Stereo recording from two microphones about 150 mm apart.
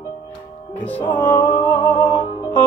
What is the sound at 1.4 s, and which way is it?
Music, 30° left (ahead or behind).